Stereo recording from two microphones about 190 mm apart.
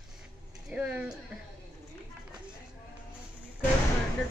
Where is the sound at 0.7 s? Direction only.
5° right (ahead or behind).